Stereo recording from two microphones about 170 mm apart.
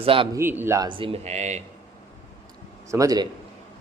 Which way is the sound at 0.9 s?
30° right (ahead or behind).